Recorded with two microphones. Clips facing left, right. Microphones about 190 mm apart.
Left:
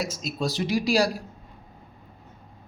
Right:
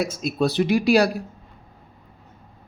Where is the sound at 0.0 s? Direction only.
55° right (ahead or behind).